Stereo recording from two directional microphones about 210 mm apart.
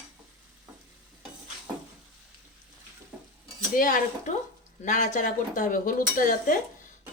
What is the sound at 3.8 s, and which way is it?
Speech, 40° left (ahead or behind).